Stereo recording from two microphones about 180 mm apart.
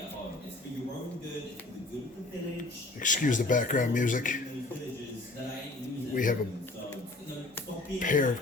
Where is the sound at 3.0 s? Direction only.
45° left (ahead or behind).